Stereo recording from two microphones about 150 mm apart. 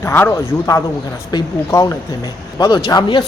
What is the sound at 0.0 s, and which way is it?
A man's voice, 15° left (ahead or behind).